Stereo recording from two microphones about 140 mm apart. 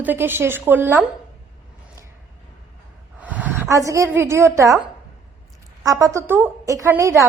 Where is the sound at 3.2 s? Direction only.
10° right (ahead or behind).